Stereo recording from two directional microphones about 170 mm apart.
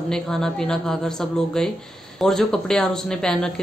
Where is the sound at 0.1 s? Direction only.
5° left (ahead or behind).